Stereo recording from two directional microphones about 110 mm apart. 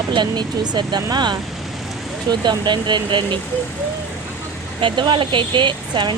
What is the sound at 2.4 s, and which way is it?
Speech, 45° right (ahead or behind).